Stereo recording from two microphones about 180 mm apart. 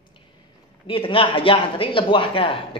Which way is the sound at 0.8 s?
30° left (ahead or behind).